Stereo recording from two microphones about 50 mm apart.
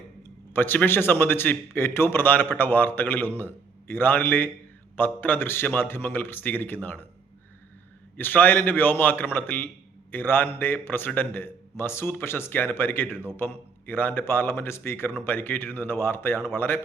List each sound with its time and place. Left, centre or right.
0.2 s a sound: left
0.9 s a man's voice: left
8.1 s a man's voice: left